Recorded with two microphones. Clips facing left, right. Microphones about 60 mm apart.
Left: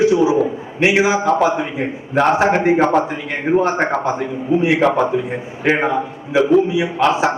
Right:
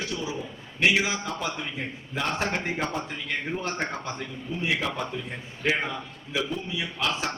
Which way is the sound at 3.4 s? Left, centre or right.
Left.